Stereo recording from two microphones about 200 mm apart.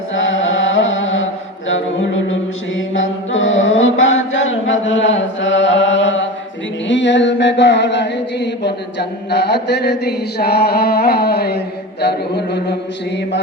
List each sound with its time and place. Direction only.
0.1 s chant: 75° left (ahead or behind)
2.7 s mantra: 75° left (ahead or behind)
6.8 s chant: 65° left (ahead or behind)